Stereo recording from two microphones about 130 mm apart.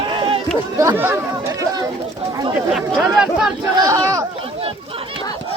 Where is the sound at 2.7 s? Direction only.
Centre (ahead or behind).